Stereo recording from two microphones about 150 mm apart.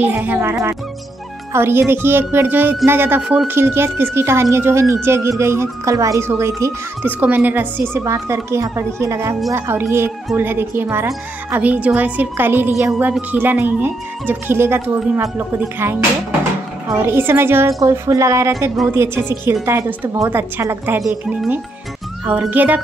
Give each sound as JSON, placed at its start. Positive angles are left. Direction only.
{"t": 0.0, "sound": "speech", "side_deg": -10}
{"t": 22.4, "sound": "speech", "side_deg": -10}